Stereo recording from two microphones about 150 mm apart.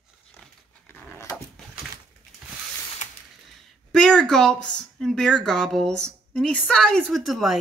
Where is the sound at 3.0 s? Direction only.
55° left (ahead or behind).